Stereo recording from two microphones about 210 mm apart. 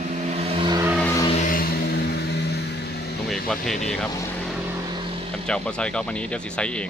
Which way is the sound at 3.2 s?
Centre (ahead or behind).